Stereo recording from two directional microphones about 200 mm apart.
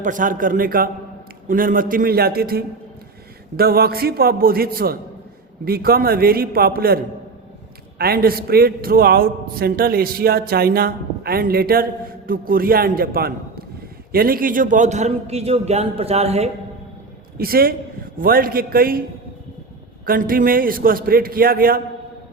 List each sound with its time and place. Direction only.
0.0 s a man's voice: 40° right (ahead or behind)
17.3 s a man's voice: 50° right (ahead or behind)
20.1 s a man's voice: 45° right (ahead or behind)